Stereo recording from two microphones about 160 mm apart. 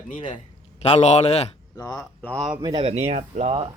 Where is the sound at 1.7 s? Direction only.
25° left (ahead or behind).